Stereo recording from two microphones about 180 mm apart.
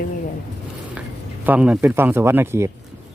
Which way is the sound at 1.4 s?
10° right (ahead or behind).